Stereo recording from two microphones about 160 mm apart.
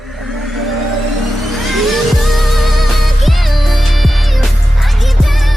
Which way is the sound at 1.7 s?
Centre (ahead or behind).